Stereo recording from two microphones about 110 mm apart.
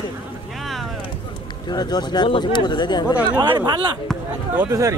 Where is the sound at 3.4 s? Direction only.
40° right (ahead or behind).